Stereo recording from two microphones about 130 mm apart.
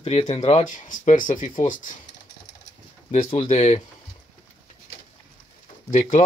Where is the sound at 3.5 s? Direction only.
50° left (ahead or behind).